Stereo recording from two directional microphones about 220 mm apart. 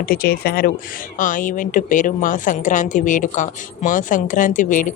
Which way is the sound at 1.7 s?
35° left (ahead or behind).